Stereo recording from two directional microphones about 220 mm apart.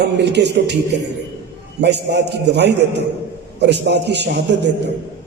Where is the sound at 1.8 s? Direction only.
50° right (ahead or behind).